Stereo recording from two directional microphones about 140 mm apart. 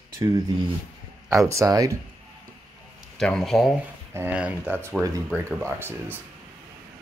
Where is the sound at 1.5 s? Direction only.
25° right (ahead or behind).